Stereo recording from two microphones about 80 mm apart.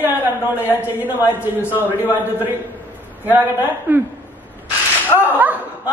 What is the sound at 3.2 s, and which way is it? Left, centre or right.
Speech, right.